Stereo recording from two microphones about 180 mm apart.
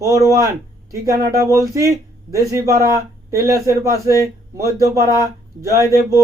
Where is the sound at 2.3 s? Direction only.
15° right (ahead or behind).